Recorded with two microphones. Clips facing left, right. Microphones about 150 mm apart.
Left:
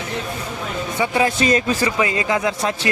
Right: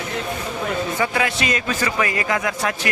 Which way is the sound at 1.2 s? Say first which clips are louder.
Left 5 dB; 35° left (ahead or behind).